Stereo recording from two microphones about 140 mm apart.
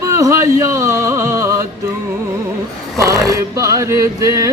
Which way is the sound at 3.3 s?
25° right (ahead or behind).